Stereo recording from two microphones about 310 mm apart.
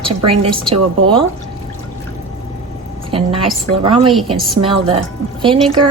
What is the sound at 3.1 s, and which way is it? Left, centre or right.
A woman's voice, centre.